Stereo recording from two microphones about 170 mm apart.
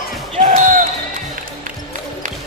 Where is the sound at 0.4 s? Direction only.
50° right (ahead or behind).